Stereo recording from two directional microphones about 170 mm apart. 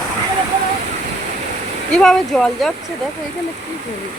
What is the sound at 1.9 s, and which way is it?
Speech, 5° left (ahead or behind).